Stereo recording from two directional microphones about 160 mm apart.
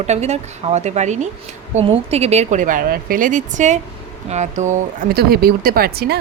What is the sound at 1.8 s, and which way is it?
A woman's voice, 35° right (ahead or behind).